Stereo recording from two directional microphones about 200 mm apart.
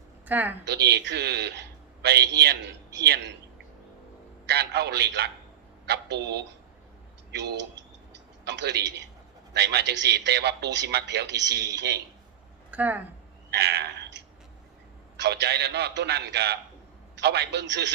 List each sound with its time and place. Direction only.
0.3 s a woman's voice: 10° right (ahead or behind)
0.7 s a man's voice: 55° right (ahead or behind)
4.4 s a man's voice: 55° right (ahead or behind)
8.1 s a sound: 60° right (ahead or behind)
9.5 s a man's voice: 55° right (ahead or behind)
12.7 s a woman's voice: 10° right (ahead or behind)
13.5 s frog: 55° right (ahead or behind)
15.2 s a man's voice: 55° right (ahead or behind)